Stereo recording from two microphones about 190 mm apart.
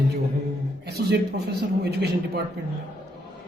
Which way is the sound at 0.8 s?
60° right (ahead or behind).